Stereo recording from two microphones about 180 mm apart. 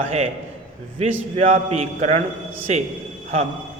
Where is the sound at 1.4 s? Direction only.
40° right (ahead or behind).